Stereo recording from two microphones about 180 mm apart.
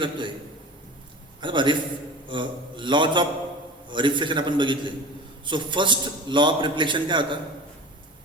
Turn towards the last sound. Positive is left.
turn(degrees=-25)  # may be behind; listen again after turning